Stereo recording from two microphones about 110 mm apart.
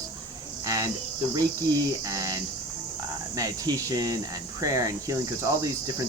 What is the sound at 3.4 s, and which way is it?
Speech, 35° right (ahead or behind).